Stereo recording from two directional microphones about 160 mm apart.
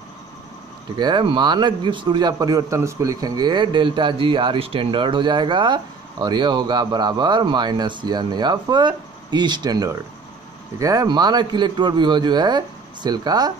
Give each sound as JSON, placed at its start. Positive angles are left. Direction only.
{"t": 0.9, "sound": "a man's voice", "side_deg": -25}